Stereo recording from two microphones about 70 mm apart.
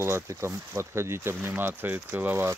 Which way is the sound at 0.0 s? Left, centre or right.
Right.